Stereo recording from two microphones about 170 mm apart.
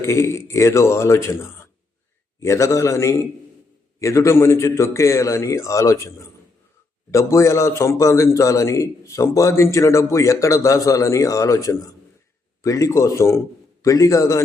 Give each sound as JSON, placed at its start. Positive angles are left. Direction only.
{"t": 0.0, "sound": "a man's voice", "side_deg": 15}